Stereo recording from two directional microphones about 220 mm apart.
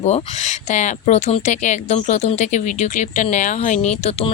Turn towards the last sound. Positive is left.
turn(degrees=30)  # may be behind; listen again after turning